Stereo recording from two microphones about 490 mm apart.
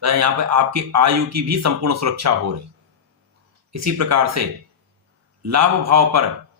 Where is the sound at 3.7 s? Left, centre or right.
Right.